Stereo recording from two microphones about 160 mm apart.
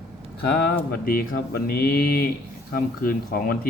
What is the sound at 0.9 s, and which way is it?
Mantra, 65° left (ahead or behind).